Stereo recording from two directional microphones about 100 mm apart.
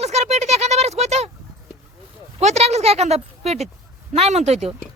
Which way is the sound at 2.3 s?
90° right.